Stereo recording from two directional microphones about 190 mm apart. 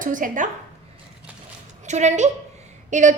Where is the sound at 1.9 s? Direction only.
40° right (ahead or behind).